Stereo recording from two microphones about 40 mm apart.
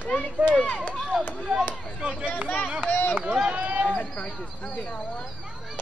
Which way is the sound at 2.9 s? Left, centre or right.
Left.